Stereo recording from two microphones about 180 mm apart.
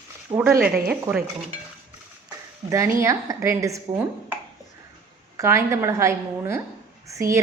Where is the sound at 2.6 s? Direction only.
15° right (ahead or behind).